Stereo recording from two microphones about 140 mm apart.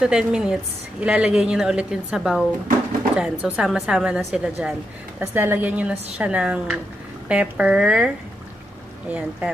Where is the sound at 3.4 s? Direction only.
5° right (ahead or behind).